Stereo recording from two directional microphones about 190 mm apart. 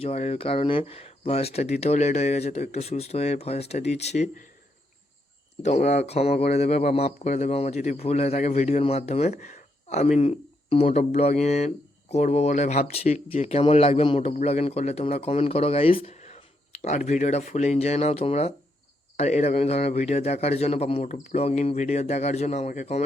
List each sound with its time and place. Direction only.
0.0 s speech: 35° left (ahead or behind)
5.6 s speech: 35° left (ahead or behind)
10.8 s speech: 40° left (ahead or behind)